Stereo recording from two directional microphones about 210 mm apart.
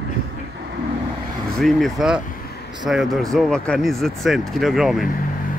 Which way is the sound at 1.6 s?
Centre (ahead or behind).